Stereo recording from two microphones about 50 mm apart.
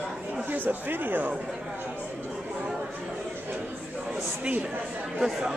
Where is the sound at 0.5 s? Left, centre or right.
Right.